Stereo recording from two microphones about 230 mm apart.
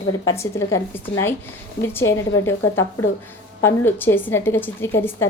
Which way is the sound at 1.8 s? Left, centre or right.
Centre.